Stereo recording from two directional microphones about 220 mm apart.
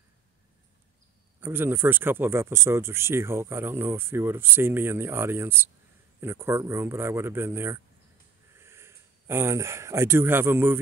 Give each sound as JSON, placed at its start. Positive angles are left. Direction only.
{"t": 1.4, "sound": "speech", "side_deg": -10}